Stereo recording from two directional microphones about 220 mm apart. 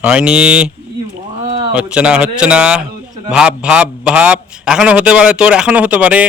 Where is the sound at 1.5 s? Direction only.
25° right (ahead or behind).